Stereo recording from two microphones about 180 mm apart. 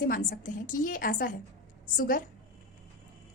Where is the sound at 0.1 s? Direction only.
50° left (ahead or behind).